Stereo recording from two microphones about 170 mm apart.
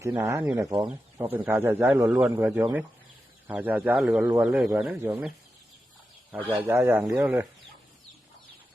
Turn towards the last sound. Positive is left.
turn(degrees=-10)  # may be behind; listen again after turning